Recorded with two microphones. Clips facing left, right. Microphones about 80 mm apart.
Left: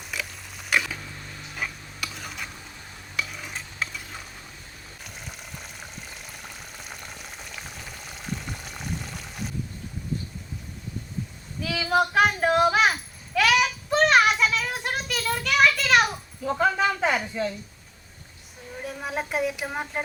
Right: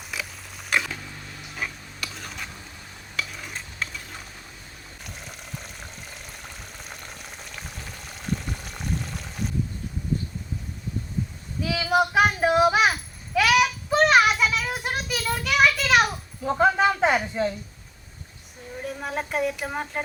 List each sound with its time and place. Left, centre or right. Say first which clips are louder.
0.1 s pig: even; centre
1.5 s stir: even; centre
5.0 s frying: right 1 dB; centre
11.6 s a sound: right 1 dB; centre
16.4 s a sound: right 3 dB; right
18.8 s speech: right 1 dB; centre